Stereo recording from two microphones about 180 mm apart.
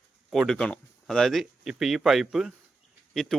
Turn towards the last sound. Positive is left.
turn(degrees=0)  # may be behind; listen again after turning